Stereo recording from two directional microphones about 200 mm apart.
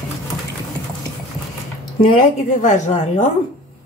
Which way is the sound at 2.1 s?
35° left (ahead or behind).